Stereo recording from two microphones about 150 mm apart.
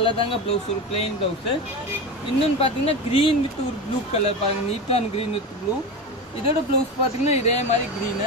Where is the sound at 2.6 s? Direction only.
40° left (ahead or behind).